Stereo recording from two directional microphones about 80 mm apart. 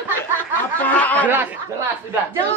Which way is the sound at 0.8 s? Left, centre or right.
Left.